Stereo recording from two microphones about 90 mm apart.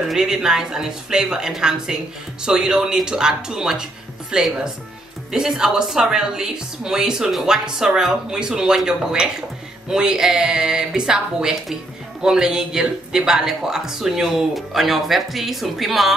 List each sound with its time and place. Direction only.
0.1 s a woman's voice: 5° right (ahead or behind)